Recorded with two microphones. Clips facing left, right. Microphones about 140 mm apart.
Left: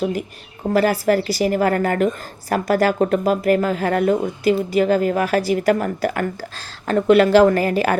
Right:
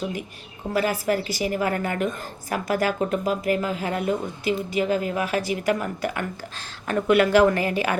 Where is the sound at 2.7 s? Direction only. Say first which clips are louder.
Left 6 dB; 55° left (ahead or behind); by 7.7 s 35° left (ahead or behind).